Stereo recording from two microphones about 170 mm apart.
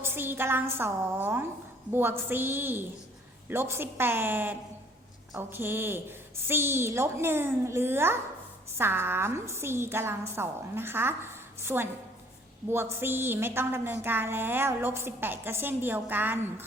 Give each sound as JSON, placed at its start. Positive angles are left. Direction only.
{"t": 0.0, "sound": "a woman's voice", "side_deg": -15}